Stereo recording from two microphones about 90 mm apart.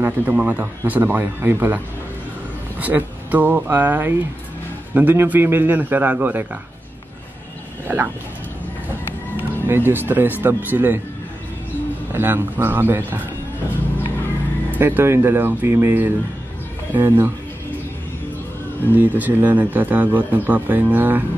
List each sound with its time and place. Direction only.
0.0 s speech: 20° right (ahead or behind)
2.8 s speech: 20° right (ahead or behind)
7.9 s speech: 25° right (ahead or behind)
9.4 s speech: 25° right (ahead or behind)
12.1 s speech: 25° right (ahead or behind)
14.8 s speech: 25° right (ahead or behind)
18.9 s speech: 20° right (ahead or behind)